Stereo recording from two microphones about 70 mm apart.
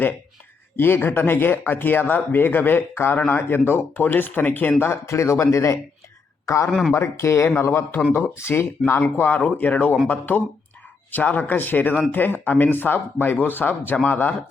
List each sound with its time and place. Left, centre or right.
0.8 s speech: left
4.8 s speech: left
6.4 s a sound: left
6.7 s speech: centre
6.9 s speech: left